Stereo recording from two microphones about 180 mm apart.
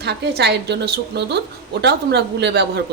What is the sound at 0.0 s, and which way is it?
A woman's voice, 65° right (ahead or behind).